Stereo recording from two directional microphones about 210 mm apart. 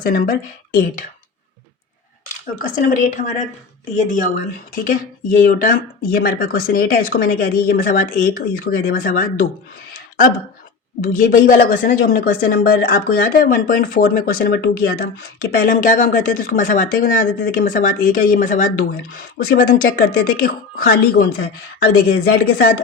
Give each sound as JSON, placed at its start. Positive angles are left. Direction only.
{"t": 0.0, "sound": "speech", "side_deg": 40}
{"t": 2.6, "sound": "a woman's voice", "side_deg": 40}
{"t": 5.4, "sound": "speech", "side_deg": 40}
{"t": 11.0, "sound": "a woman's voice", "side_deg": 40}